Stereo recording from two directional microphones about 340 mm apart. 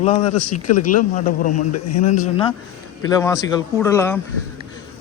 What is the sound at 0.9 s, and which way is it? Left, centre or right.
A man's voice, left.